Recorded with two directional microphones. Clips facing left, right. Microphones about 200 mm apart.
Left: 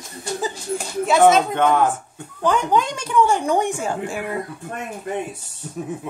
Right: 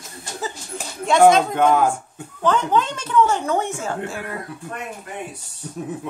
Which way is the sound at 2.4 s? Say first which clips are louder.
Even; 10° left (ahead or behind).